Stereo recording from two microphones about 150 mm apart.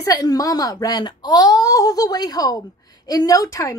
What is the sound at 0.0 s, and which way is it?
A woman's voice, 25° left (ahead or behind).